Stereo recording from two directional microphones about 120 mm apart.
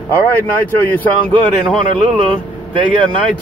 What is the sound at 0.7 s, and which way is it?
Speech, 15° left (ahead or behind).